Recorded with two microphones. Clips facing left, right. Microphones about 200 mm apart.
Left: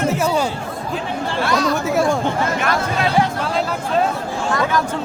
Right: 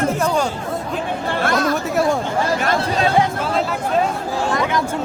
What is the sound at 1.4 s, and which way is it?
Chatter, 50° right (ahead or behind).